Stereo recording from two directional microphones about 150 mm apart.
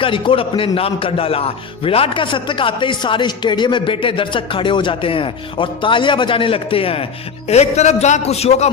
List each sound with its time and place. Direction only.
0.0 s a man's voice: 35° left (ahead or behind)